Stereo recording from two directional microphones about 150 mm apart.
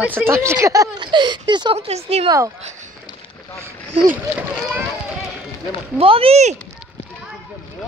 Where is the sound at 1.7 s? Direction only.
45° right (ahead or behind).